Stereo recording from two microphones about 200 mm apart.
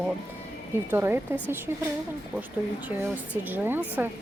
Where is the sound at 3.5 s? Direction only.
10° right (ahead or behind).